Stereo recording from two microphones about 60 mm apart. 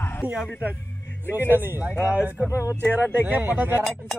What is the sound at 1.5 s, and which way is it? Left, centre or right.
Speech, right.